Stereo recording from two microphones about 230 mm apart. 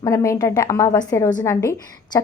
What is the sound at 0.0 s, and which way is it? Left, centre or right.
A woman's voice, centre.